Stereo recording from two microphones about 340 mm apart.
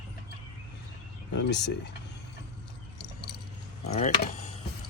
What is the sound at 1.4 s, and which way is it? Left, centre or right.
Speech, left.